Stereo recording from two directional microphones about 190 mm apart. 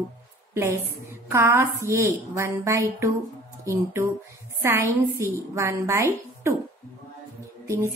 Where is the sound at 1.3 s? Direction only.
15° right (ahead or behind).